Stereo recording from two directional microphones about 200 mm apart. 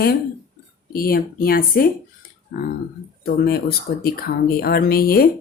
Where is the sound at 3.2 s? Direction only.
50° left (ahead or behind).